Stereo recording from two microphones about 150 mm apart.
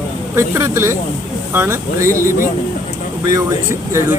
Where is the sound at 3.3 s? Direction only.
20° right (ahead or behind).